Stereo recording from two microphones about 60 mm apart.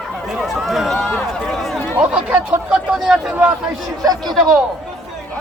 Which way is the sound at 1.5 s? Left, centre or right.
Centre.